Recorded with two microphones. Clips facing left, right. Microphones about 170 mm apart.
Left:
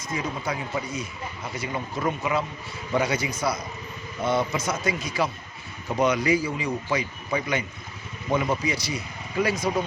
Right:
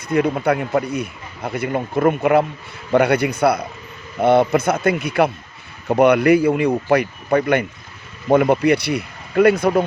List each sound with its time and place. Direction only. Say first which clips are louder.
0.1 s speech: right 12 dB; 60° right (ahead or behind)